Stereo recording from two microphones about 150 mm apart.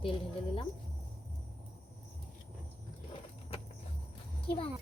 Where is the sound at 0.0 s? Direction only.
35° left (ahead or behind).